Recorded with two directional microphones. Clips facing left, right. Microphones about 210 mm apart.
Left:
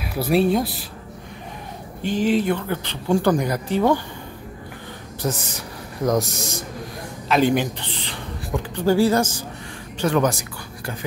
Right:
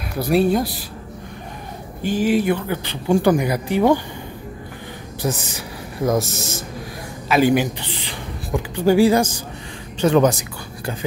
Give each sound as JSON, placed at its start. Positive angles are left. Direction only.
{"t": 0.1, "sound": "speech", "side_deg": 0}
{"t": 2.0, "sound": "speech", "side_deg": -5}
{"t": 5.2, "sound": "speech", "side_deg": -10}